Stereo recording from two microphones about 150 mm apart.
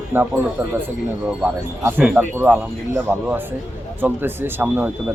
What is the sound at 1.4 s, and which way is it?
Speech, 15° right (ahead or behind).